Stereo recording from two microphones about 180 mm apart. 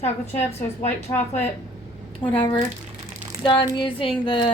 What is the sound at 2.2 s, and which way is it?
A woman's voice, 30° left (ahead or behind).